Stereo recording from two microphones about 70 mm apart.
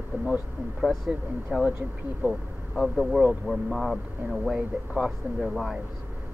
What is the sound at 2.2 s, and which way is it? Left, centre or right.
Speech, right.